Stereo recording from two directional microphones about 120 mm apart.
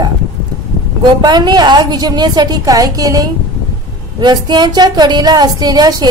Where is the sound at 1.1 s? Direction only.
35° right (ahead or behind).